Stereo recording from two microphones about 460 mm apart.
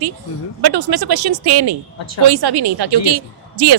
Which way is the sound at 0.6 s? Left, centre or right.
Right.